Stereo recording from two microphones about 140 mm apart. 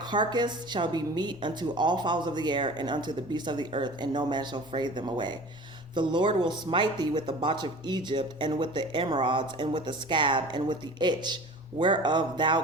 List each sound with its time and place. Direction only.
0.1 s speech: 30° right (ahead or behind)